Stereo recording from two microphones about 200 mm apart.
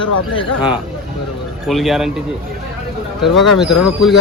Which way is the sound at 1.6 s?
Centre (ahead or behind).